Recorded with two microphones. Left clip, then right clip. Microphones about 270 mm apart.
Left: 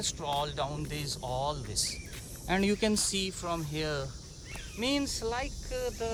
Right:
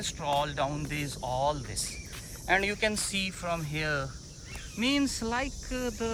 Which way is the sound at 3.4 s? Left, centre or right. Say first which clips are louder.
Right 2 dB; right.